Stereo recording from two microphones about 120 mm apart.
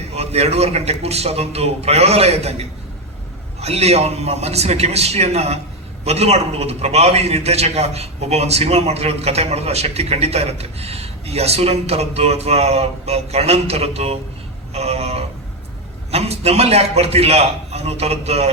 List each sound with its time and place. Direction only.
0.2 s a man's voice: 60° right (ahead or behind)